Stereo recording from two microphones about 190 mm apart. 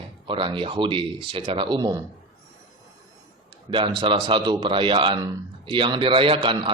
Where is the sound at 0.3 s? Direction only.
25° right (ahead or behind).